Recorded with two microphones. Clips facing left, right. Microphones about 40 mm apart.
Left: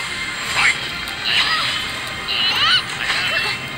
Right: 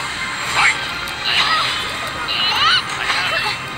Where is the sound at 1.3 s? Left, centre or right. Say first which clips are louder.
Right 2 dB; centre.